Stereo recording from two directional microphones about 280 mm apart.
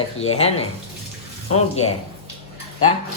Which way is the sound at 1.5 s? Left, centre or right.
Left.